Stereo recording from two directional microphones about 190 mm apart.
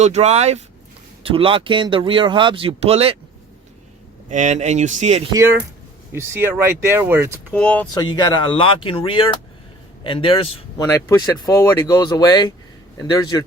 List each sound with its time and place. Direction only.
0.0 s speech: 35° right (ahead or behind)
4.3 s speech: 40° right (ahead or behind)
5.3 s speech: 15° right (ahead or behind)
7.5 s speech: 5° left (ahead or behind)
7.9 s speech: 20° left (ahead or behind)
10.8 s speech: 15° left (ahead or behind)